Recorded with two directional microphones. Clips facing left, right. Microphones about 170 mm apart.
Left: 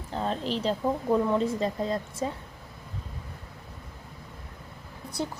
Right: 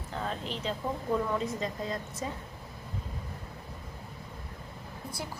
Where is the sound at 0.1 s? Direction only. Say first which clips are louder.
Left 6 dB; 30° left (ahead or behind).